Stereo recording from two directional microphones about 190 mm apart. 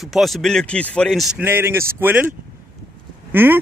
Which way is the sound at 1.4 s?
10° right (ahead or behind).